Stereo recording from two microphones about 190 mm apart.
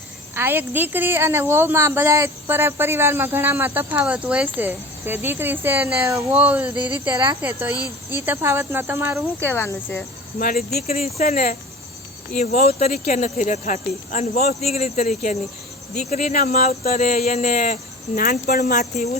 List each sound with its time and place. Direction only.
0.3 s speech: 10° right (ahead or behind)
9.4 s speech: 10° left (ahead or behind)
10.4 s speech: 50° left (ahead or behind)
10.8 s speech: 35° left (ahead or behind)
12.6 s speech: 35° left (ahead or behind)